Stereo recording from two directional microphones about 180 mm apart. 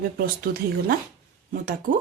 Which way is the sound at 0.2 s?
55° right (ahead or behind).